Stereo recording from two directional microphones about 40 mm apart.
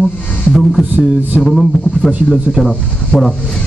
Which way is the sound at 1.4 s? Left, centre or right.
Centre.